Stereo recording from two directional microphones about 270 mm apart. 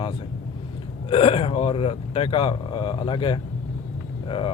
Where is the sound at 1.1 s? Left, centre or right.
Centre.